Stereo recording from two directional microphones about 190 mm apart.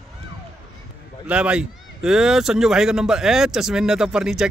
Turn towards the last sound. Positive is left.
turn(degrees=-5)  # may be behind; listen again after turning